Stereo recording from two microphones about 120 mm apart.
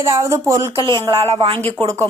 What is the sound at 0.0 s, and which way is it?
Speech, 25° right (ahead or behind).